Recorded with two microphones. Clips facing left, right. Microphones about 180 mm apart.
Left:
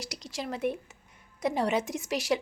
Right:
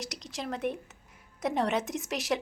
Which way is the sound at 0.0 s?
Centre (ahead or behind).